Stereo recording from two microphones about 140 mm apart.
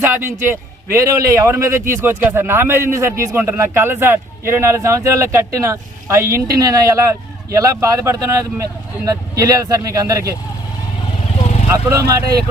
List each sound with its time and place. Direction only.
0.0 s a man's voice: 15° right (ahead or behind)
11.7 s a man's voice: 20° right (ahead or behind)